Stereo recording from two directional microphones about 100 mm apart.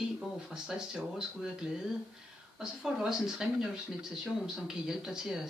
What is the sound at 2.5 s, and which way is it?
Speech, 5° right (ahead or behind).